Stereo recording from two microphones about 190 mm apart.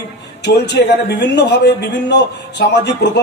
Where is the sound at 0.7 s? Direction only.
65° left (ahead or behind).